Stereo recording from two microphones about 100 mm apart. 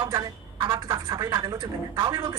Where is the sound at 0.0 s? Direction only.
40° right (ahead or behind).